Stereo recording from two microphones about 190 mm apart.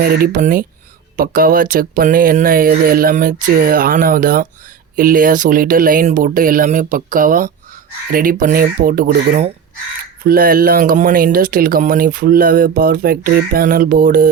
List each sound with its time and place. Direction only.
0.0 s speech: 50° right (ahead or behind)